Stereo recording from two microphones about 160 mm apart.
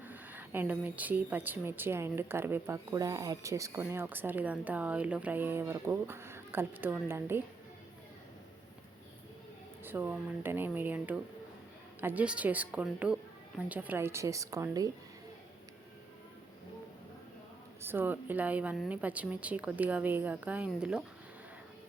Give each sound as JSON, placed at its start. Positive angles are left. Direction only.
{"t": 0.0, "sound": "a woman's voice", "side_deg": -10}
{"t": 9.8, "sound": "a woman's voice", "side_deg": -10}
{"t": 17.8, "sound": "a woman's voice", "side_deg": -10}